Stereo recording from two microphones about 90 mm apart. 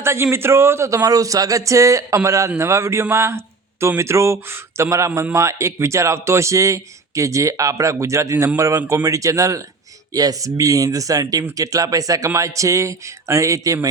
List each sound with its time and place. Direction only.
0.0 s a man's voice: 30° right (ahead or behind)